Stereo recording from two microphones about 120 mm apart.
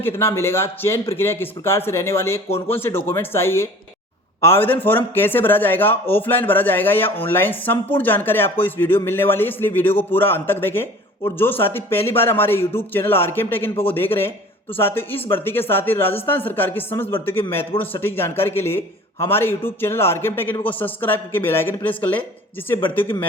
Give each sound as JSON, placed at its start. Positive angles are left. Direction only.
{"t": 0.0, "sound": "a man's voice", "side_deg": 20}